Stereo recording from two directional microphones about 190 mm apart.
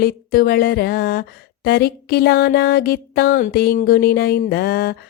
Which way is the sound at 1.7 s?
55° left (ahead or behind).